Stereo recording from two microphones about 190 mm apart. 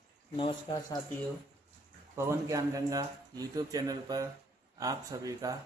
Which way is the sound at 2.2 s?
15° right (ahead or behind).